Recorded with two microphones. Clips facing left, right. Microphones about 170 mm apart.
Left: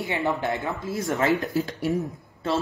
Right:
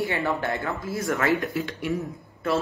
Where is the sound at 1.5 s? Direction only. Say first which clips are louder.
Left 3 dB; 40° left (ahead or behind).